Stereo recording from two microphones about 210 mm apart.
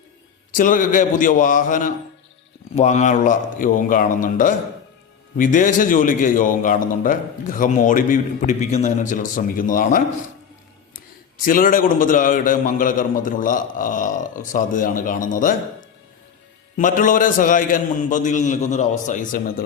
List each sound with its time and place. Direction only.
0.5 s a man's voice: 40° left (ahead or behind)
11.4 s a man's voice: 40° left (ahead or behind)
16.7 s a man's voice: 40° left (ahead or behind)